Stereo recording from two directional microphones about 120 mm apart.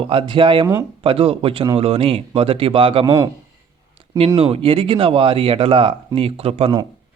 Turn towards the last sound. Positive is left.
turn(degrees=-55)  # may be behind; listen again after turning